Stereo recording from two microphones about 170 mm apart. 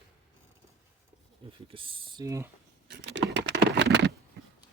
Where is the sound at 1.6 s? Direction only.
30° right (ahead or behind).